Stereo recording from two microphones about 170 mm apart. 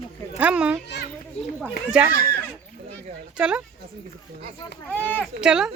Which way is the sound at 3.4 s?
5° right (ahead or behind).